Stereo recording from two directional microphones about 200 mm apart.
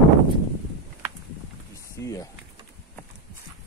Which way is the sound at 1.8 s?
15° left (ahead or behind).